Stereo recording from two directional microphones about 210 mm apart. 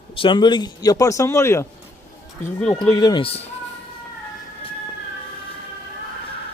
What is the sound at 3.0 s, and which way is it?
Speech, 20° left (ahead or behind).